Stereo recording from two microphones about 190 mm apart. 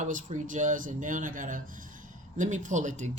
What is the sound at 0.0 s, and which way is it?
Speech, 40° right (ahead or behind).